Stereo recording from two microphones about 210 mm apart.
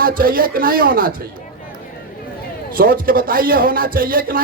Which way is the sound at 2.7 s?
45° right (ahead or behind).